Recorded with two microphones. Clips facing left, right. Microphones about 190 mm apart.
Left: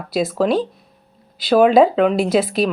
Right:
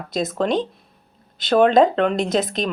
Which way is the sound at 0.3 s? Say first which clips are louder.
Left 2 dB; 5° left (ahead or behind).